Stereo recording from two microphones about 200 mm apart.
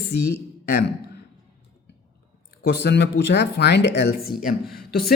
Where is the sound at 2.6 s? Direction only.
60° left (ahead or behind).